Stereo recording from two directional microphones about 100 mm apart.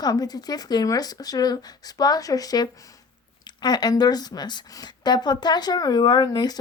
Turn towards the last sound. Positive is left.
turn(degrees=45)  # may be behind; listen again after turning